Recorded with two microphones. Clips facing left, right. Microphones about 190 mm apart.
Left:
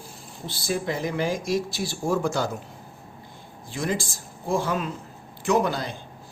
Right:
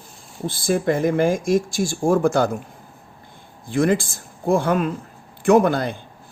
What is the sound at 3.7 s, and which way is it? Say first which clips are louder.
Speech: right 9 dB; 55° right (ahead or behind).